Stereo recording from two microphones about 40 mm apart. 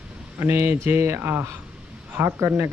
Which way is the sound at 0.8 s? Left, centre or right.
Right.